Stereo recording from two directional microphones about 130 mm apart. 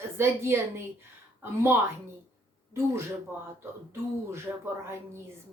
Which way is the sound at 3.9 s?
20° right (ahead or behind).